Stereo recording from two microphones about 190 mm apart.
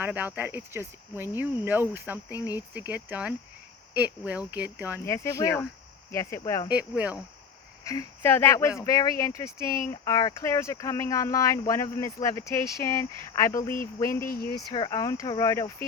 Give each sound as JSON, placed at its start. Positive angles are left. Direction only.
{"t": 0.0, "sound": "cricket", "side_deg": -10}
{"t": 4.5, "sound": "cricket", "side_deg": -10}
{"t": 5.0, "sound": "speech", "side_deg": 15}
{"t": 6.7, "sound": "cricket", "side_deg": -5}
{"t": 7.9, "sound": "speech", "side_deg": 15}
{"t": 14.3, "sound": "speech", "side_deg": 55}
{"t": 14.7, "sound": "speech", "side_deg": 20}